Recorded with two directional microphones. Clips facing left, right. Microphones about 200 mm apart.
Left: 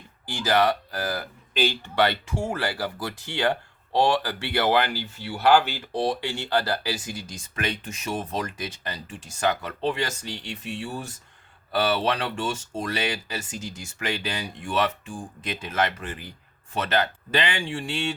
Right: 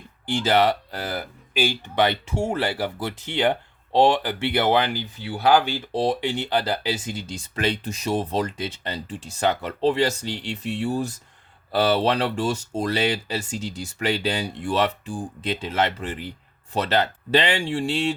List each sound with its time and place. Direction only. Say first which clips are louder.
0.4 s speech: right 1 dB; 25° right (ahead or behind)
1.5 s speech: right 1 dB; 10° right (ahead or behind); by 17.8 s 35° right (ahead or behind)